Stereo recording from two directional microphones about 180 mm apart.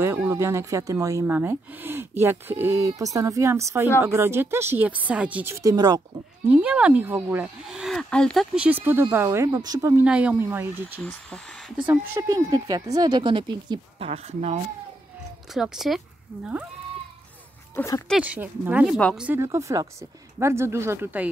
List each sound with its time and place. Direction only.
0.0 s speech: 15° right (ahead or behind)
6.5 s speech: 5° right (ahead or behind)
8.6 s speech: 10° right (ahead or behind)
10.0 s speech: 10° right (ahead or behind)
11.1 s speech: 5° left (ahead or behind)
11.9 s speech: 15° right (ahead or behind); by 14.6 s 35° right (ahead or behind)
15.5 s speech: centre (ahead or behind)
17.7 s speech: 15° left (ahead or behind)
18.0 s speech: 5° right (ahead or behind)